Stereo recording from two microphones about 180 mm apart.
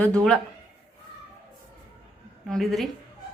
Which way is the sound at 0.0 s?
5° left (ahead or behind).